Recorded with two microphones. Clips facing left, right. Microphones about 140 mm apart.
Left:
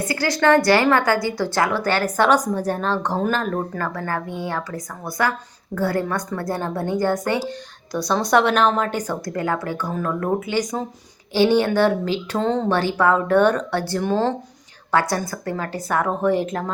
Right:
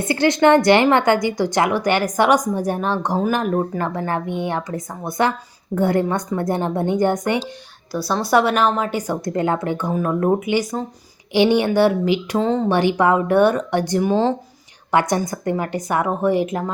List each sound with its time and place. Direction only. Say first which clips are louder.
0.0 s speech: right 4 dB; 25° right (ahead or behind)
7.9 s speech: right 1 dB; 5° right (ahead or behind)
9.2 s a woman's voice: right 4 dB; 25° right (ahead or behind)
12.4 s speech: even; centre (ahead or behind)
12.6 s a woman's voice: right 2 dB; 15° right (ahead or behind)
14.9 s a woman's voice: right 2 dB; 20° right (ahead or behind)